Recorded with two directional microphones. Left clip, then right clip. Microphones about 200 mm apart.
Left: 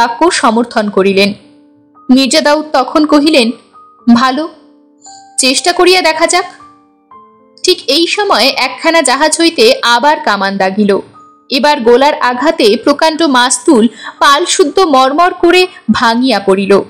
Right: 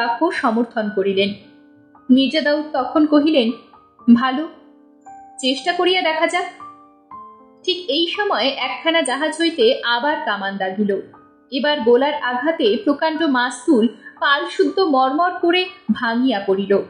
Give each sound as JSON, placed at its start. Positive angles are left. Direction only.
{"t": 0.0, "sound": "a woman's voice", "side_deg": 35}
{"t": 7.6, "sound": "a woman's voice", "side_deg": 35}